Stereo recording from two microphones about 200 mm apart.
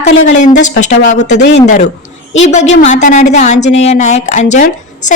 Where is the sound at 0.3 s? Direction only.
40° left (ahead or behind).